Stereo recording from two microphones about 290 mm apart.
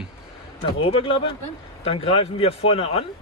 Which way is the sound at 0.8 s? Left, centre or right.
Centre.